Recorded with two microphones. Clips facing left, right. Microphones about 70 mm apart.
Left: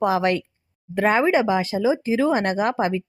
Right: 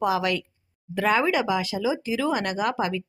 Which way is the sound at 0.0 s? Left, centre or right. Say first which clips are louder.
Left 4 dB; left.